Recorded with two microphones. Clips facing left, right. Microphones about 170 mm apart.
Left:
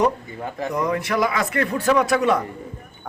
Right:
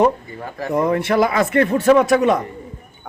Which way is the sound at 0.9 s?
30° right (ahead or behind).